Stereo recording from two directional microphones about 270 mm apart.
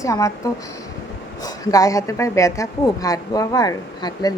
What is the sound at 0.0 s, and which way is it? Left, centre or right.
Speech, centre.